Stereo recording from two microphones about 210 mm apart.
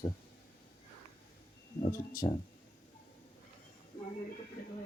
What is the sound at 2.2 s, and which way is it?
Speech, 25° left (ahead or behind).